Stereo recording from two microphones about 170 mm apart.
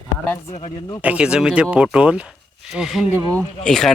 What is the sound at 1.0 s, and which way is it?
Speech, 5° right (ahead or behind).